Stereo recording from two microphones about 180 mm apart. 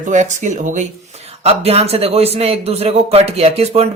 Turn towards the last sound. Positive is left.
turn(degrees=-35)  # may be behind; listen again after turning